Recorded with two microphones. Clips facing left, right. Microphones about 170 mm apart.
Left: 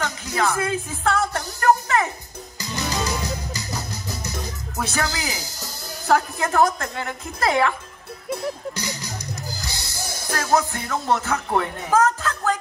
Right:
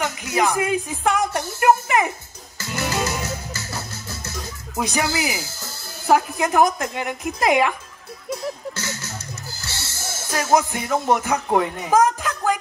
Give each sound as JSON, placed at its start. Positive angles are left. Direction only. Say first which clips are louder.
{"t": 0.0, "sound": "a woman's voice", "louder": "right 2 dB", "side_deg": -15}
{"t": 2.6, "sound": "music", "louder": "right 2 dB", "side_deg": 15}
{"t": 4.7, "sound": "a woman's voice", "louder": "right 3 dB", "side_deg": -15}
{"t": 5.4, "sound": "speech", "louder": "right 1 dB", "side_deg": 15}
{"t": 6.0, "sound": "a woman's voice", "louder": "right 2 dB", "side_deg": -15}
{"t": 8.7, "sound": "music", "louder": "left 1 dB", "side_deg": 15}
{"t": 10.3, "sound": "music", "louder": "right 2 dB", "side_deg": -15}
{"t": 10.7, "sound": "speech", "louder": "right 3 dB", "side_deg": -15}